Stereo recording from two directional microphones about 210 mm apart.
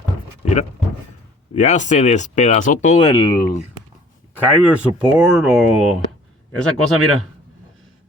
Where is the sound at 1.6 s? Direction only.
35° left (ahead or behind).